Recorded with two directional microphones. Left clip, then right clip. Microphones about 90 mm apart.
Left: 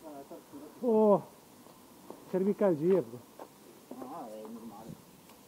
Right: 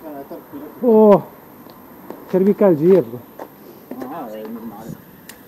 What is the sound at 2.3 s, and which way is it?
Speech, 30° right (ahead or behind).